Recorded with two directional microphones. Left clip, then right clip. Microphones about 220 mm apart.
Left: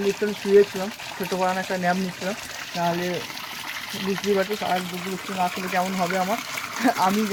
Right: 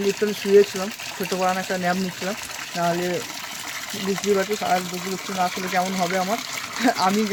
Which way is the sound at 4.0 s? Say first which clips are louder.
Right 1 dB; 45° right (ahead or behind).